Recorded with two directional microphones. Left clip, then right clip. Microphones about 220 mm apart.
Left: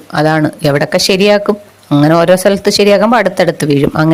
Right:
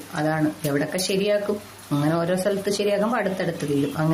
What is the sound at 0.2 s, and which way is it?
Speech, 45° left (ahead or behind).